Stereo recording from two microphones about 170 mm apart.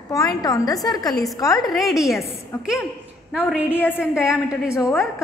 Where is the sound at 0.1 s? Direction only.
20° left (ahead or behind).